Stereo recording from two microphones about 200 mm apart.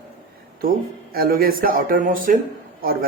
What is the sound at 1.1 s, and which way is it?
Speech, 45° right (ahead or behind).